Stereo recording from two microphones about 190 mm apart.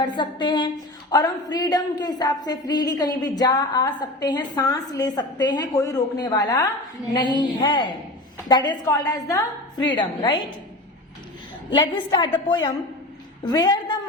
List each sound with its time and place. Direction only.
0.2 s speech: 25° left (ahead or behind)
11.7 s a woman's voice: 25° left (ahead or behind)